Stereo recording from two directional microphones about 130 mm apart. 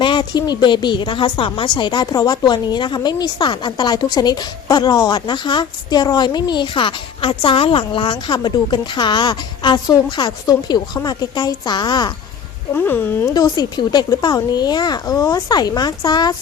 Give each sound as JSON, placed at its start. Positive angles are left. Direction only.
{"t": 0.0, "sound": "speech", "side_deg": 40}
{"t": 12.7, "sound": "speech", "side_deg": 15}